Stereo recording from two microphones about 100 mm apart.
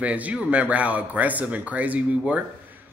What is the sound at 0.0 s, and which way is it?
A man's voice, 15° right (ahead or behind).